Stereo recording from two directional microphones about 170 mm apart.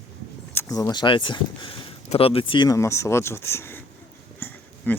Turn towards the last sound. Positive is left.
turn(degrees=10)  # may be behind; listen again after turning